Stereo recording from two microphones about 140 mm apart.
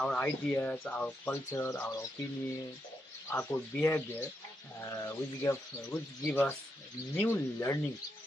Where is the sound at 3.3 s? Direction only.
15° left (ahead or behind).